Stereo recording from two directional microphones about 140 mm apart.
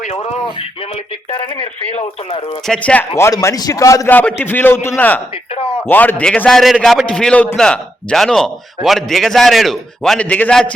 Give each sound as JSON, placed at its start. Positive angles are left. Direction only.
{"t": 1.3, "sound": "speech", "side_deg": 40}
{"t": 2.6, "sound": "a man's voice", "side_deg": 10}
{"t": 3.2, "sound": "a man's voice", "side_deg": 20}
{"t": 4.1, "sound": "a man's voice", "side_deg": 10}